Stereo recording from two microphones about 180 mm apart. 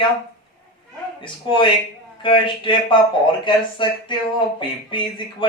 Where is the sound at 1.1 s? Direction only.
25° left (ahead or behind).